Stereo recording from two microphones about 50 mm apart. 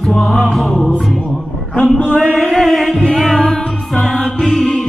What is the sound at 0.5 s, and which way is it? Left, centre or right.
Music, centre.